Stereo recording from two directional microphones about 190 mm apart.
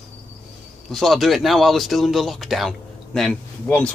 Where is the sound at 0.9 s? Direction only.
Centre (ahead or behind).